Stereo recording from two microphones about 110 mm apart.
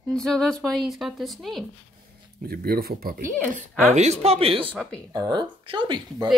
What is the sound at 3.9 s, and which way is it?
Speech, 90° right.